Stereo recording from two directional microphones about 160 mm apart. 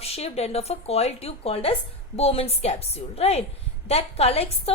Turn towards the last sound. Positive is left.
turn(degrees=40)  # may be behind; listen again after turning